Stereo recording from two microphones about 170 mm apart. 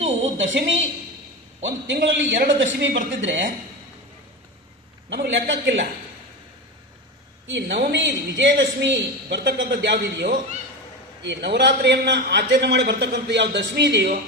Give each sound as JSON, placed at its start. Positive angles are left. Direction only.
{"t": 0.3, "sound": "a man's voice", "side_deg": -90}
{"t": 2.4, "sound": "a woman's voice", "side_deg": -80}
{"t": 3.2, "sound": "a man's voice", "side_deg": -90}
{"t": 5.0, "sound": "a man's voice", "side_deg": -90}
{"t": 7.4, "sound": "a man's voice", "side_deg": -90}
{"t": 11.2, "sound": "a man's voice", "side_deg": -85}